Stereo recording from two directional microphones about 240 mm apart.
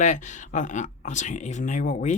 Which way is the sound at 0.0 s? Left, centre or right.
Left.